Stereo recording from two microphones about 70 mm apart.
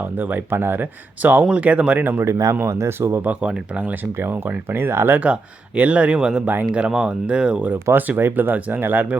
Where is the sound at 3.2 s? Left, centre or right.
Right.